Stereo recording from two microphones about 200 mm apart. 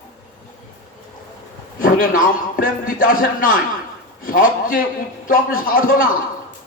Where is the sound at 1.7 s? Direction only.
45° left (ahead or behind).